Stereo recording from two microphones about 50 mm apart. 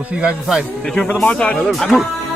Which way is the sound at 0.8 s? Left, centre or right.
Left.